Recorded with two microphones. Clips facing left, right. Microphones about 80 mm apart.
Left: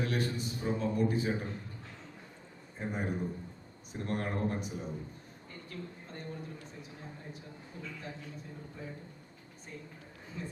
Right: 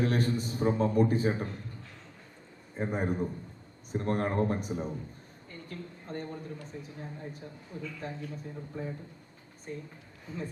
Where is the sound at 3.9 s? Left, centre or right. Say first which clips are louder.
Right 6 dB; right.